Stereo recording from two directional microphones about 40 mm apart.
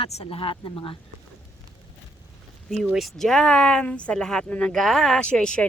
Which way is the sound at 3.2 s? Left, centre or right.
Centre.